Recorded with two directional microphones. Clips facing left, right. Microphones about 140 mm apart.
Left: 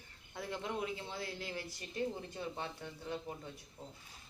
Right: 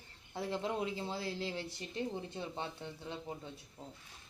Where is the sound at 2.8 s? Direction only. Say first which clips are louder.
Right 2 dB; 20° right (ahead or behind).